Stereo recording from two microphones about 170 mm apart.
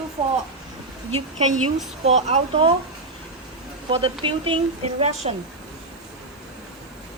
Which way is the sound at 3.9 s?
35° right (ahead or behind).